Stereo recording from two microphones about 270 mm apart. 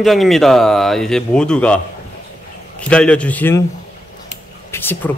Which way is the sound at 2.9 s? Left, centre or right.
Centre.